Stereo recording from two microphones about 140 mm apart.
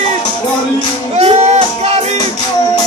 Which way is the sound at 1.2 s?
50° right (ahead or behind).